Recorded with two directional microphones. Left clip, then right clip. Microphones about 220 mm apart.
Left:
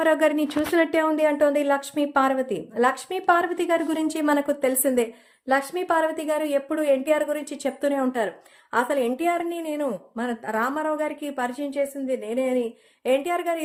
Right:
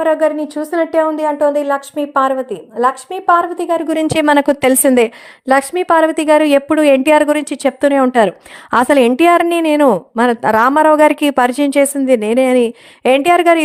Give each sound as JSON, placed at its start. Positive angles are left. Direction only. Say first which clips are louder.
{"t": 0.0, "sound": "speech", "louder": "right 7 dB", "side_deg": 0}
{"t": 0.5, "sound": "a woman's voice", "louder": "right 5 dB", "side_deg": 15}
{"t": 0.9, "sound": "a woman's voice", "louder": "right 7 dB", "side_deg": -10}
{"t": 3.8, "sound": "a woman's voice", "louder": "right 11 dB", "side_deg": -40}